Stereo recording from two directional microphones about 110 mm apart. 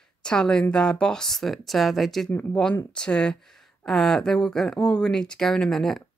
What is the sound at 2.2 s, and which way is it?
Speech, 15° left (ahead or behind).